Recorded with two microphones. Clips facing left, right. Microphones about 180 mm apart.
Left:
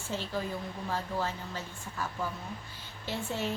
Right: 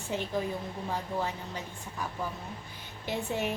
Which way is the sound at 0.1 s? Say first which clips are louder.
Right 3 dB; 15° right (ahead or behind).